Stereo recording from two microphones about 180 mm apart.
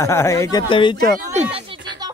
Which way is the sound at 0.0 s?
15° left (ahead or behind).